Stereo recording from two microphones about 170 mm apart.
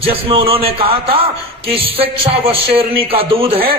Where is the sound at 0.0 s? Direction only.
35° right (ahead or behind).